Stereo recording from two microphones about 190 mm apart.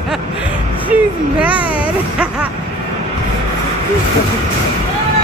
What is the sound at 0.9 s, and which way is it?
Speech, 5° right (ahead or behind).